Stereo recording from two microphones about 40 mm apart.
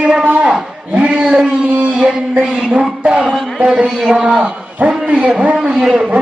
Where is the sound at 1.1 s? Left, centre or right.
Centre.